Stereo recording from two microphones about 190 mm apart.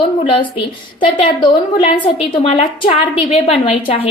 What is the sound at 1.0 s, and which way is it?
A woman's voice, 25° left (ahead or behind).